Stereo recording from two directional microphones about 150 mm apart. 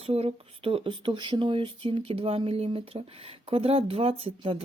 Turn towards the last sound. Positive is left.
turn(degrees=-35)  # may be behind; listen again after turning